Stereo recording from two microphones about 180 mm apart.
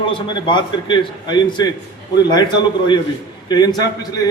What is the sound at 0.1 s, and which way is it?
A man's voice, 25° left (ahead or behind).